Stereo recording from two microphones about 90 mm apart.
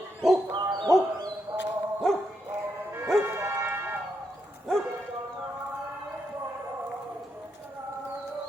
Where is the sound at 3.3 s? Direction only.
30° right (ahead or behind).